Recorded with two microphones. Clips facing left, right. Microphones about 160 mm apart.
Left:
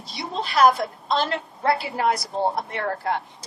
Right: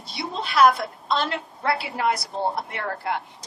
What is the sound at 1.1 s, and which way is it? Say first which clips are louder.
Speech: left 1 dB; 40° left (ahead or behind).